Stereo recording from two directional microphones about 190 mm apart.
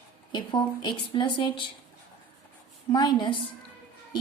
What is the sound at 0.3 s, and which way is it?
Speech, 25° left (ahead or behind).